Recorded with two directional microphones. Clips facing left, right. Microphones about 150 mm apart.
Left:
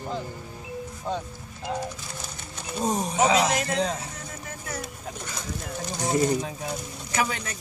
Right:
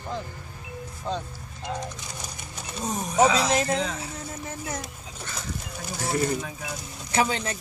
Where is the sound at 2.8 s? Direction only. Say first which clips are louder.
Right 1 dB; 30° left (ahead or behind).